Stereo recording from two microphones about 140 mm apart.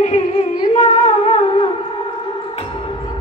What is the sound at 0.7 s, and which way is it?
Music, 50° left (ahead or behind).